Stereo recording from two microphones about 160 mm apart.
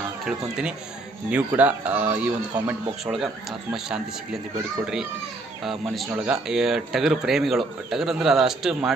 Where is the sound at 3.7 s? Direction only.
5° right (ahead or behind).